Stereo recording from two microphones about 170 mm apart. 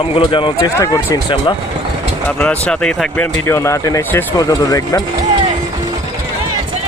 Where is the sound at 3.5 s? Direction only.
15° left (ahead or behind).